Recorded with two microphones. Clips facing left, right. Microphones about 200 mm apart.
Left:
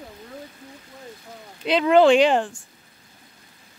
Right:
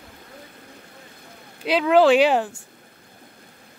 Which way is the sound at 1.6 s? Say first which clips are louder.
Left 1 dB; 5° right (ahead or behind).